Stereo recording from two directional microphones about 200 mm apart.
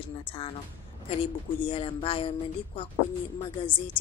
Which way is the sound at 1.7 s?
30° left (ahead or behind).